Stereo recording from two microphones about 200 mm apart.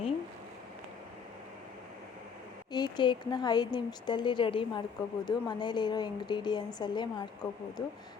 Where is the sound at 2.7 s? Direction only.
20° left (ahead or behind).